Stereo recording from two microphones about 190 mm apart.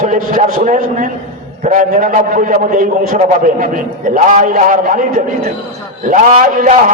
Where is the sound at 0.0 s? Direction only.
40° right (ahead or behind).